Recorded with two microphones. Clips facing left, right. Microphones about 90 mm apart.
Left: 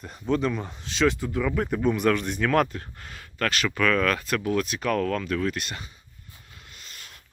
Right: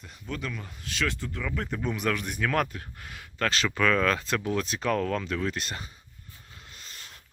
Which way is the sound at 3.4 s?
30° right (ahead or behind).